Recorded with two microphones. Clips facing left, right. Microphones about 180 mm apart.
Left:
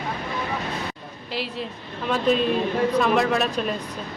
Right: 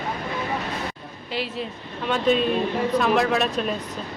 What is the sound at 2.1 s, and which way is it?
A woman's voice, centre (ahead or behind).